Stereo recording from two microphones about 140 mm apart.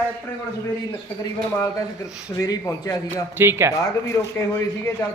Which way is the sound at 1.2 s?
25° left (ahead or behind).